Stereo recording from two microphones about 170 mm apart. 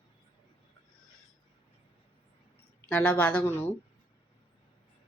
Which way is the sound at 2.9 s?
5° left (ahead or behind).